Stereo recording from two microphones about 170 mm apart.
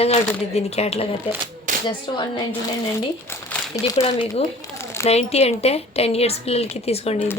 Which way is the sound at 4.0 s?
35° left (ahead or behind).